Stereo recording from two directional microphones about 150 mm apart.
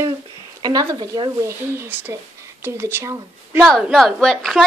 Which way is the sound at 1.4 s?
20° right (ahead or behind).